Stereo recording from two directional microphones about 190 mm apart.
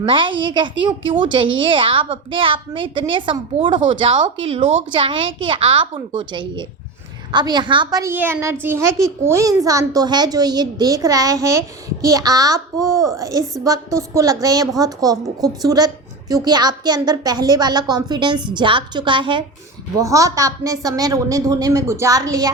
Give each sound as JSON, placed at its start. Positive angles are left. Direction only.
{"t": 0.0, "sound": "a child's voice", "side_deg": -25}